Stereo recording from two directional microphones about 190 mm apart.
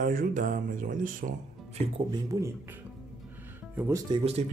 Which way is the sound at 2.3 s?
15° right (ahead or behind).